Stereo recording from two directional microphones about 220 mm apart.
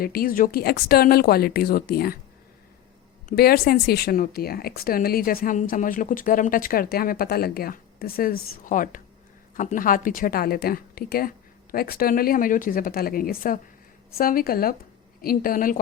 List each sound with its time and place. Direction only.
0.0 s speech: 40° left (ahead or behind)
3.2 s speech: 45° left (ahead or behind)